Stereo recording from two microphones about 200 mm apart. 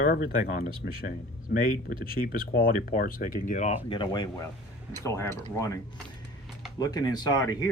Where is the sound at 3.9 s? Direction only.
25° left (ahead or behind).